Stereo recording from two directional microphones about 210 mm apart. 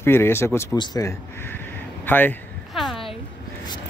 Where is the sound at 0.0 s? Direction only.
10° left (ahead or behind).